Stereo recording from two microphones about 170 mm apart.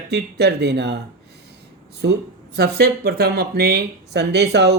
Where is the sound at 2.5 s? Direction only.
70° right (ahead or behind).